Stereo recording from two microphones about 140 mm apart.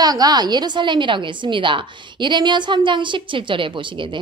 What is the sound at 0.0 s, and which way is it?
A woman's voice, 25° right (ahead or behind).